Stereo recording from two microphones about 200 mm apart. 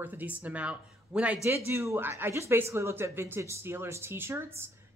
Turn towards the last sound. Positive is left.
turn(degrees=-10)  # may be behind; listen again after turning